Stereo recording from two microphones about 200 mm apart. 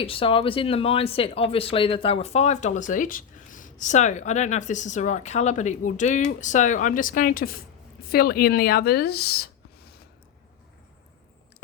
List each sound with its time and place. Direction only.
0.0 s a woman's voice: 25° left (ahead or behind); by 9.5 s 50° left (ahead or behind)